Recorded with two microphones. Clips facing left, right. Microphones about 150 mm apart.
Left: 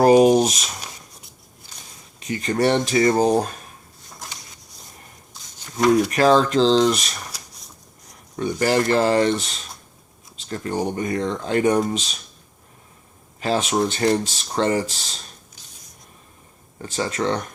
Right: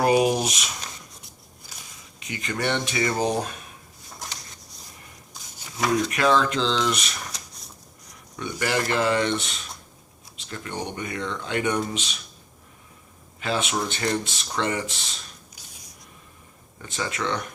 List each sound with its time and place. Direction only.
0.0 s a sound: 40° left (ahead or behind)
2.1 s speech: 40° left (ahead or behind)
6.1 s speech: 35° left (ahead or behind)
8.4 s speech: 35° left (ahead or behind)
13.4 s speech: 35° left (ahead or behind)
16.7 s speech: 35° left (ahead or behind)